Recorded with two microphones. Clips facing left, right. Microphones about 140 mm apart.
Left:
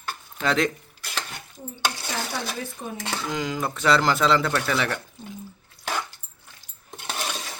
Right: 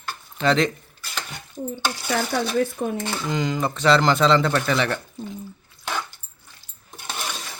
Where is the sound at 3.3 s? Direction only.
5° left (ahead or behind).